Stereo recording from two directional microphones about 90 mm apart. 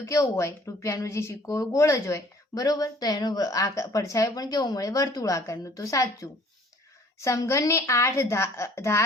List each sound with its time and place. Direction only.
0.0 s a woman's voice: 35° left (ahead or behind)